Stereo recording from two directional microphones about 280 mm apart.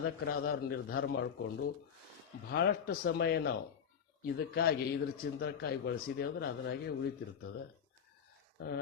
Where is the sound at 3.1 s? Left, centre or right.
Left.